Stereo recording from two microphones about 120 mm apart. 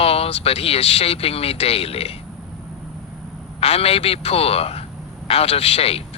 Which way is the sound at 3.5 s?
55° left (ahead or behind).